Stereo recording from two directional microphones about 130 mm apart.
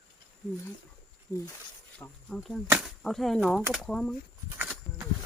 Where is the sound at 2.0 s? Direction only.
Centre (ahead or behind).